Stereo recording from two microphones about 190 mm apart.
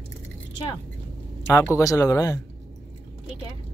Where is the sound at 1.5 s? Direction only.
15° left (ahead or behind).